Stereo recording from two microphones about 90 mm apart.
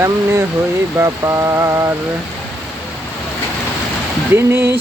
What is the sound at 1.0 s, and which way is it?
Mantra, 35° right (ahead or behind).